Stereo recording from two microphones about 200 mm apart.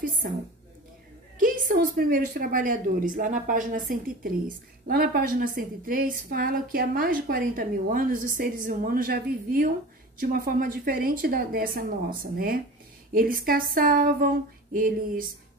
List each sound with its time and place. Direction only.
1.4 s a woman's voice: 45° right (ahead or behind)